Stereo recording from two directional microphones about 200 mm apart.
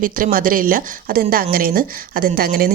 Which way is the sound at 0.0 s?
45° right (ahead or behind).